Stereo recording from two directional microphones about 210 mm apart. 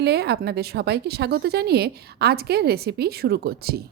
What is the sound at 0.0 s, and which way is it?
A woman's voice, 50° right (ahead or behind).